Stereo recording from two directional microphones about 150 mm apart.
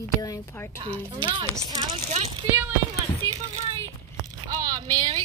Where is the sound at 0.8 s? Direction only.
35° right (ahead or behind).